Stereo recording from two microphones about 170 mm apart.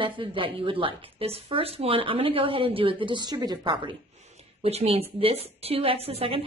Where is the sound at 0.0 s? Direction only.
30° right (ahead or behind).